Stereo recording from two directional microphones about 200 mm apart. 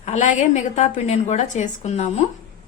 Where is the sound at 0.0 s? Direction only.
35° left (ahead or behind).